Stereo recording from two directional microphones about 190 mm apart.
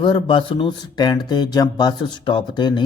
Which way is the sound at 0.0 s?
25° left (ahead or behind).